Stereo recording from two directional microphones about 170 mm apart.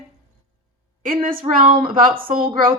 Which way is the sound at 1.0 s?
55° right (ahead or behind).